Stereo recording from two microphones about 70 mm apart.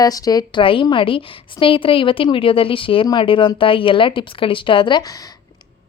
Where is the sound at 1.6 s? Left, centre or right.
Left.